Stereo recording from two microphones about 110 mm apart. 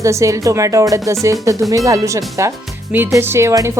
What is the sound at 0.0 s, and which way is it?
Speech, 30° right (ahead or behind).